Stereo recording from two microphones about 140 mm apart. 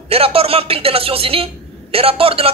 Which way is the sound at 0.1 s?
45° right (ahead or behind).